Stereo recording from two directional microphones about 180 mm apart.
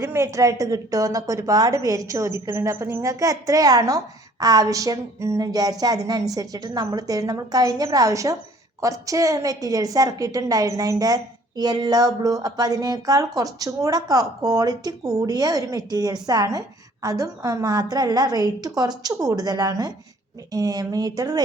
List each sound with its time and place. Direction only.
0.0 s a woman's voice: 15° right (ahead or behind)